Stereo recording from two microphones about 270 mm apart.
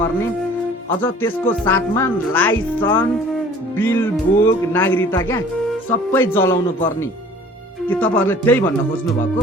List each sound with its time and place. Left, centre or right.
1.0 s speech: centre
7.9 s speech: centre